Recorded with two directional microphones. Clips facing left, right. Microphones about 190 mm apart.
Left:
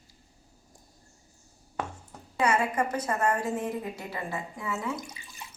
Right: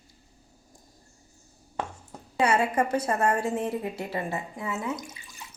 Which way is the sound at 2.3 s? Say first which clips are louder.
Right 2 dB; 30° right (ahead or behind).